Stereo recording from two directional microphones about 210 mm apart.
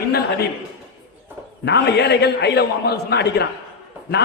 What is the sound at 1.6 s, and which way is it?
A man's voice, 50° left (ahead or behind).